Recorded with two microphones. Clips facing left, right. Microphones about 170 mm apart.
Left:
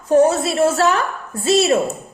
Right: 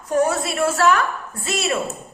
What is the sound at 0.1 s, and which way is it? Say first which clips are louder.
A woman's voice: left 6 dB; 25° left (ahead or behind).